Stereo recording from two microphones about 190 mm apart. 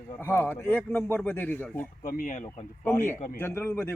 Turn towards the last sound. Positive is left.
turn(degrees=10)  # may be behind; listen again after turning